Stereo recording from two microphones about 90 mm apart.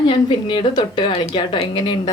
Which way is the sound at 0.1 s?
65° left (ahead or behind).